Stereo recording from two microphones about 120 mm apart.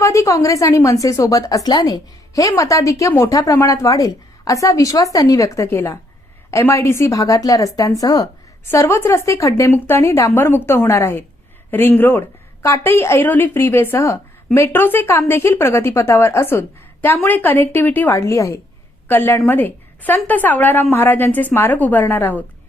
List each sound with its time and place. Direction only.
0.0 s a woman's voice: 25° left (ahead or behind)